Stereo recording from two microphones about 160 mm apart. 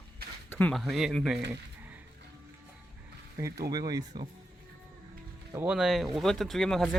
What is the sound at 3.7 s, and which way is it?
Speech, 25° right (ahead or behind).